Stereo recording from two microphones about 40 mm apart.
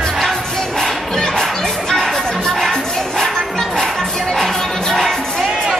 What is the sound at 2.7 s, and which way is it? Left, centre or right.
Music, centre.